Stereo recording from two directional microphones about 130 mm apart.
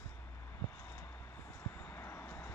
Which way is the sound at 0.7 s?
20° left (ahead or behind).